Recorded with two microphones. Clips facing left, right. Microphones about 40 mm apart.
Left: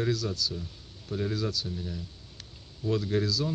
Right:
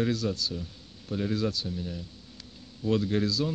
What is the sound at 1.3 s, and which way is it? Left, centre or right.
Speech, right.